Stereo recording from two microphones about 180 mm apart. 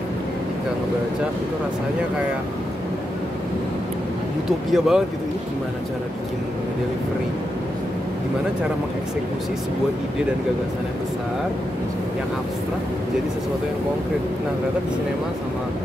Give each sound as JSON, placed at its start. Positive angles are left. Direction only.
{"t": 4.5, "sound": "speech", "side_deg": 0}